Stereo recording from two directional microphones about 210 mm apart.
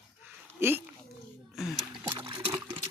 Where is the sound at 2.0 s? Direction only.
20° right (ahead or behind).